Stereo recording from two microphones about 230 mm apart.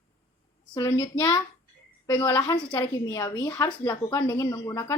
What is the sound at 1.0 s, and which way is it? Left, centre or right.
A woman's voice, centre.